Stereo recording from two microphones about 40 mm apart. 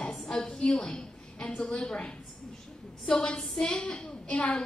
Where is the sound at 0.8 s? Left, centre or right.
Left.